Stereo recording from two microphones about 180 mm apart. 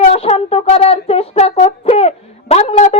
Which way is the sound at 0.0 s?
35° left (ahead or behind).